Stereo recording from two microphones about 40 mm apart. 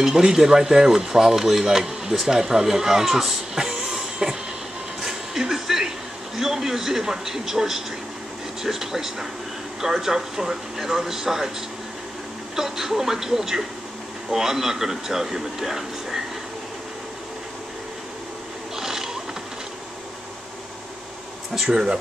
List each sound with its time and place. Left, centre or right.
0.0 s speech: centre
3.5 s train: centre
5.0 s a sound: centre
6.4 s speech: centre
12.5 s speech: centre
18.8 s a sound: centre
21.6 s speech: centre